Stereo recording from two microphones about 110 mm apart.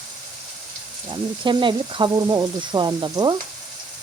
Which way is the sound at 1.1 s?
45° right (ahead or behind).